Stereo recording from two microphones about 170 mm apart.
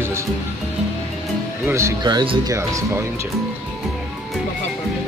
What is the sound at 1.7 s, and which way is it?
Speech, 15° right (ahead or behind).